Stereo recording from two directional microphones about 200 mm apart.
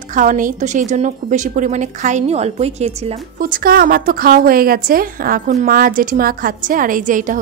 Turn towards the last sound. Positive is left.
turn(degrees=-40)  # may be behind; listen again after turning